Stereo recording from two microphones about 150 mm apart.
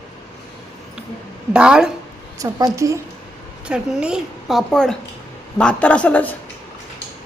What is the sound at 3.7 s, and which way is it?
A woman's voice, 5° right (ahead or behind).